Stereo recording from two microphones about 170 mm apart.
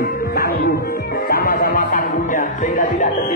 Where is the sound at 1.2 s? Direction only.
60° left (ahead or behind).